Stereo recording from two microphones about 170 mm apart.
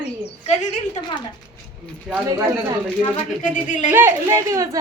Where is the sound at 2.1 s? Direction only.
20° right (ahead or behind).